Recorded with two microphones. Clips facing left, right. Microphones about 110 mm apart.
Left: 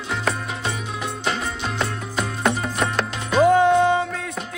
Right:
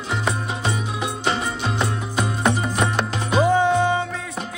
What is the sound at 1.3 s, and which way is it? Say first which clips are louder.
Music: right 2 dB; 5° right (ahead or behind).